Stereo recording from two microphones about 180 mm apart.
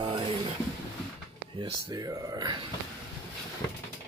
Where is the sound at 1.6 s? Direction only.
20° right (ahead or behind).